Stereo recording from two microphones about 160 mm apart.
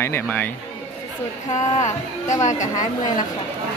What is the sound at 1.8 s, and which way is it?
Speech, 50° left (ahead or behind).